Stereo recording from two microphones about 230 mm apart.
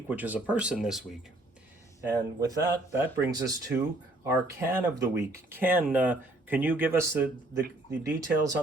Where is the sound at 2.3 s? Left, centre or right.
Centre.